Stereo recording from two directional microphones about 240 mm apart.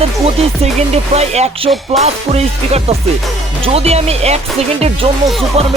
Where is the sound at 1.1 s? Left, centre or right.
Right.